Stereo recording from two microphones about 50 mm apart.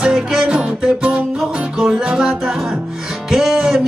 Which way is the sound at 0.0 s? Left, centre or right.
Centre.